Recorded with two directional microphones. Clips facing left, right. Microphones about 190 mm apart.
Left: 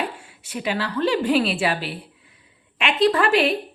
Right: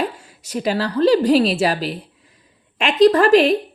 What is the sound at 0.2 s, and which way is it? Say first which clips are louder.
A woman's voice: right 6 dB; 40° right (ahead or behind).